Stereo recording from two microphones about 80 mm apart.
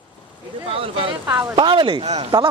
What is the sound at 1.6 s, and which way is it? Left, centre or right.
Speech, right.